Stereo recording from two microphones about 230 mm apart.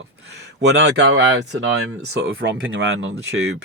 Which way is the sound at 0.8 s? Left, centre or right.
Right.